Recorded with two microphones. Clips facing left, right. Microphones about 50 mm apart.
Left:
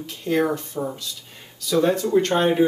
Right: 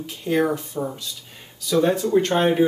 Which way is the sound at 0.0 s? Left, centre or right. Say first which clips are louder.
Even; centre.